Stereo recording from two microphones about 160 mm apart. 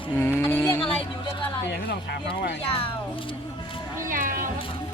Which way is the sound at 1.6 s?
90° left.